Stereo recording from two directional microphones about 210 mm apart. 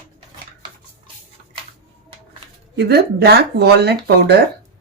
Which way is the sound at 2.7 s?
50° right (ahead or behind).